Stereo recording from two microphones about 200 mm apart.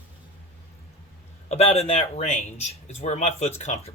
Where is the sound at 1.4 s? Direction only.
30° left (ahead or behind).